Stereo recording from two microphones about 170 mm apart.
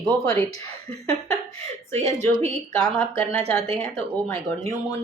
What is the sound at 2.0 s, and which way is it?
Speech, 40° right (ahead or behind).